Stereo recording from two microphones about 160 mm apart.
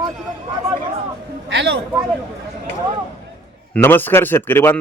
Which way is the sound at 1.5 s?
90° right.